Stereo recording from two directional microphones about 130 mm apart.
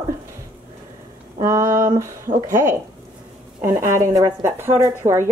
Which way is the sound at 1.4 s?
20° right (ahead or behind).